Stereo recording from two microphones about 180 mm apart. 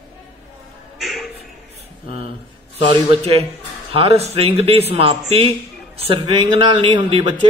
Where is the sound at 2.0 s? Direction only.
30° right (ahead or behind).